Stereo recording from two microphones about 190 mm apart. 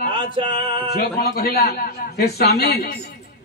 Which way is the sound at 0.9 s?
55° left (ahead or behind).